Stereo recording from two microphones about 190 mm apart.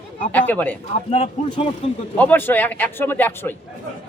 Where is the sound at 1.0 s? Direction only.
30° left (ahead or behind).